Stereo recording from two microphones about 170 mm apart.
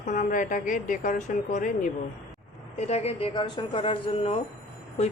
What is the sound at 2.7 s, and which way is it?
Mantra, 40° left (ahead or behind).